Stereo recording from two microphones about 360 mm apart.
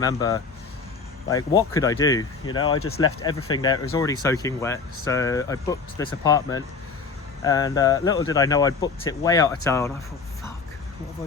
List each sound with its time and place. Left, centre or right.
0.0 s speech: centre
2.7 s speech: left
3.2 s speech: centre